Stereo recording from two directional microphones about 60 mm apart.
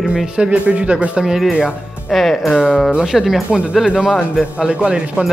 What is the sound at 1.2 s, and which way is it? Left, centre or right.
A woman's voice, centre.